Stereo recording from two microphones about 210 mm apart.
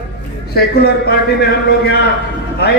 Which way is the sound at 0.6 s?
45° left (ahead or behind).